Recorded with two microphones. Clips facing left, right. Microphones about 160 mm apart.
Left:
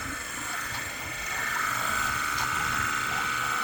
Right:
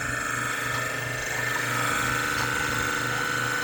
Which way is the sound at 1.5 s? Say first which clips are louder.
Right 2 dB; 75° right (ahead or behind).